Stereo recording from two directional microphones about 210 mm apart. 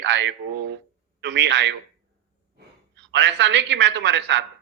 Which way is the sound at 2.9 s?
60° right (ahead or behind).